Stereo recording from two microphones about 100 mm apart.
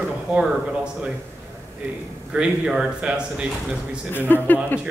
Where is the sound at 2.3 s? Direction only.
5° right (ahead or behind).